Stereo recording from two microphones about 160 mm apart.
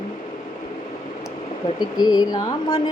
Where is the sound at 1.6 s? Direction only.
25° left (ahead or behind).